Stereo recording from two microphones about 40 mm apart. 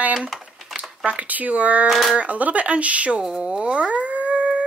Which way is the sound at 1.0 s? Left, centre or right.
Right.